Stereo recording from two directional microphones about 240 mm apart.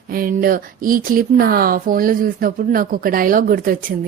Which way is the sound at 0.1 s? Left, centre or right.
Right.